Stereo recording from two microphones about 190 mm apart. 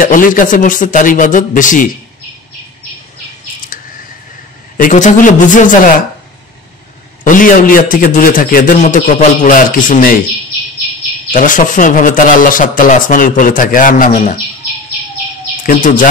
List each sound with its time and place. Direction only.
0.0 s speech: 45° left (ahead or behind)
3.7 s scissors: 45° left (ahead or behind)
4.7 s speech: 45° left (ahead or behind)
7.2 s speech: 45° left (ahead or behind)
11.3 s speech: 45° left (ahead or behind)
15.6 s speech: 45° left (ahead or behind)